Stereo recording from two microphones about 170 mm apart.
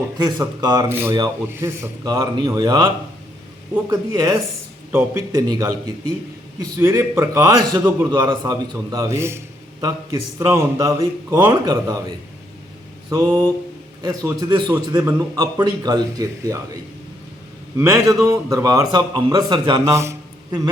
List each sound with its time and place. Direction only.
0.2 s a man's voice: 20° right (ahead or behind)
6.7 s a man's voice: 15° right (ahead or behind)
17.7 s a man's voice: 15° right (ahead or behind)